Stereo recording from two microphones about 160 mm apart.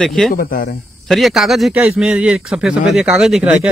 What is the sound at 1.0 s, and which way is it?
A man's voice, centre (ahead or behind).